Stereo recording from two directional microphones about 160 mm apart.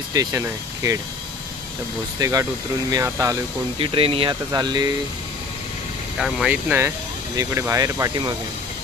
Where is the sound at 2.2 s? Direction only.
20° right (ahead or behind).